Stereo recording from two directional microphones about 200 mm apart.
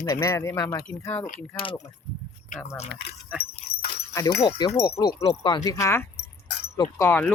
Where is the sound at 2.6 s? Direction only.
35° left (ahead or behind).